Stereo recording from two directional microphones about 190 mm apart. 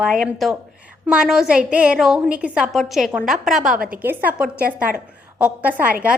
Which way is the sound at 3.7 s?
45° right (ahead or behind).